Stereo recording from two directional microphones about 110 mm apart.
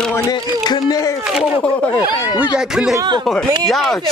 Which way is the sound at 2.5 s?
5° right (ahead or behind).